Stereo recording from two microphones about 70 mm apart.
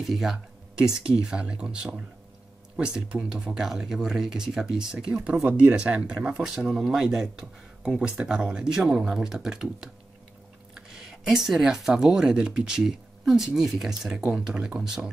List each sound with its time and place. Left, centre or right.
0.0 s speech: centre